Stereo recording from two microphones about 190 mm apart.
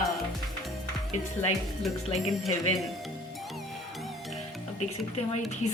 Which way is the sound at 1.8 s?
Centre (ahead or behind).